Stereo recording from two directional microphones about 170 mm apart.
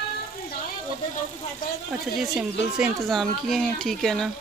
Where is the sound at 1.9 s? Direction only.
5° right (ahead or behind).